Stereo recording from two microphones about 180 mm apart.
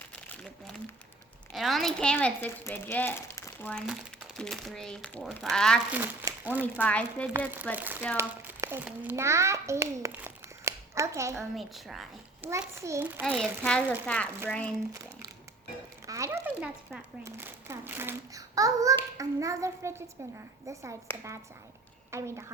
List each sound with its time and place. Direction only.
0.1 s crumpling: centre (ahead or behind)
1.5 s speech: centre (ahead or behind)
3.8 s speech: centre (ahead or behind)
5.9 s speech: 10° right (ahead or behind)
6.7 s speech: 5° left (ahead or behind)
7.8 s a child's voice: 10° right (ahead or behind)
11.3 s speech: centre (ahead or behind)
12.4 s speech: 15° right (ahead or behind)
13.2 s speech: centre (ahead or behind)
16.0 s speech: 15° right (ahead or behind)
21.1 s speech: 10° left (ahead or behind)
22.1 s speech: 15° right (ahead or behind)